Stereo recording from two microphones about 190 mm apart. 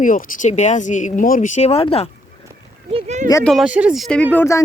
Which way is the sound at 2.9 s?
35° right (ahead or behind).